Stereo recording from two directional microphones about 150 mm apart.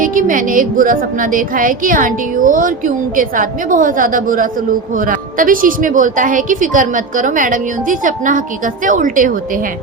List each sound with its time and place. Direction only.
0.0 s a woman's voice: 65° right (ahead or behind)